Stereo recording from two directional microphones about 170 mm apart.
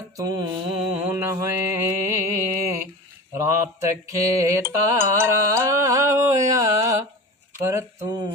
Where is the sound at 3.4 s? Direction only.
20° right (ahead or behind).